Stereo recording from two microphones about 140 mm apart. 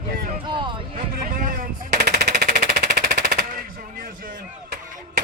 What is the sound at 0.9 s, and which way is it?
Machine gun, 90° right.